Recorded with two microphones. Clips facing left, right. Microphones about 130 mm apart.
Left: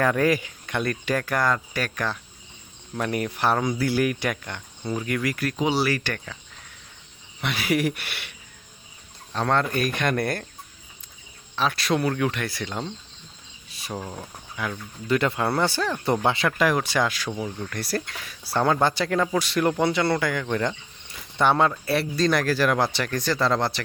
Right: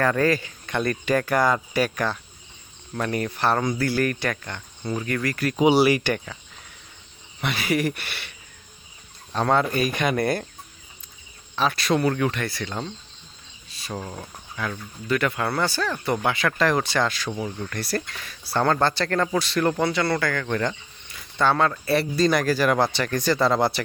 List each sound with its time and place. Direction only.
0.0 s speech: 10° left (ahead or behind)
0.6 s speech: centre (ahead or behind)
2.9 s speech: 10° left (ahead or behind)
5.5 s speech: 15° right (ahead or behind)
7.4 s speech: centre (ahead or behind)
9.3 s speech: 5° right (ahead or behind)
11.5 s speech: centre (ahead or behind)
13.9 s speech: 5° left (ahead or behind)
15.0 s speech: 25° left (ahead or behind)
16.2 s speech: 25° left (ahead or behind)
16.5 s speech: 10° left (ahead or behind)
21.7 s speech: 5° left (ahead or behind)